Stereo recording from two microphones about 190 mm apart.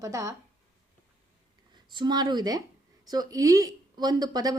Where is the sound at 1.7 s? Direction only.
25° right (ahead or behind).